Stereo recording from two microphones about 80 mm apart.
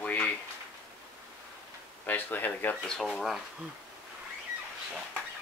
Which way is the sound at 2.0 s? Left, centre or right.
Left.